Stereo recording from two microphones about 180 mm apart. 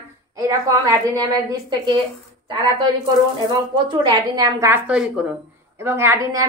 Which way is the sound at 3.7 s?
20° right (ahead or behind).